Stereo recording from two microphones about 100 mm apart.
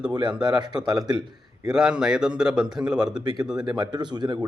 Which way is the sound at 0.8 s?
45° right (ahead or behind).